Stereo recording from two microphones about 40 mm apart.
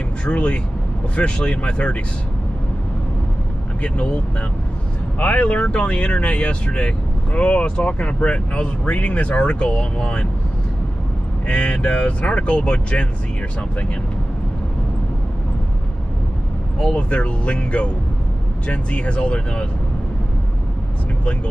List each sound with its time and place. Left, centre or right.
0.2 s speech: left
3.8 s speech: left
5.2 s speech: left
11.4 s speech: left
16.8 s speech: left